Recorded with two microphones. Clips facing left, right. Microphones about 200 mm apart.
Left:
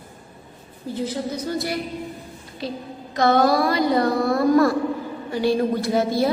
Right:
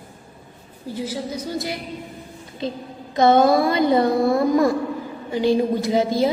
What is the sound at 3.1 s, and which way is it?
A woman's voice, 20° right (ahead or behind).